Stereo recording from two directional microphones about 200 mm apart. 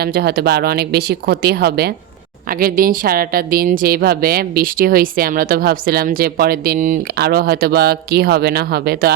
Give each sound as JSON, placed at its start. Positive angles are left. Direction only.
{"t": 0.0, "sound": "a woman's voice", "side_deg": -50}